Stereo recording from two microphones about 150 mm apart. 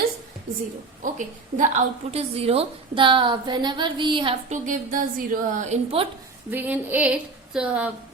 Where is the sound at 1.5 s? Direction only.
55° right (ahead or behind); by 4.3 s 35° right (ahead or behind).